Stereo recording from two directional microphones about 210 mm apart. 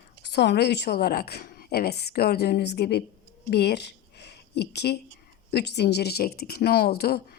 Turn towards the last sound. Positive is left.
turn(degrees=50)  # may be behind; listen again after turning